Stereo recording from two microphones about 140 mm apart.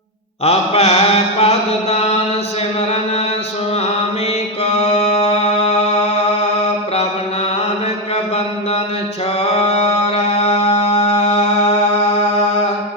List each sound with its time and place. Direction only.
0.4 s mantra: 50° left (ahead or behind)
4.6 s music: 55° left (ahead or behind)
9.4 s mantra: 50° left (ahead or behind)
10.3 s music: 50° left (ahead or behind)